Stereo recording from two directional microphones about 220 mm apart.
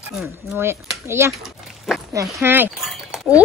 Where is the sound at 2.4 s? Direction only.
10° right (ahead or behind).